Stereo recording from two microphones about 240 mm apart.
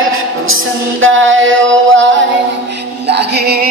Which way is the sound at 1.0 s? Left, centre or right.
Right.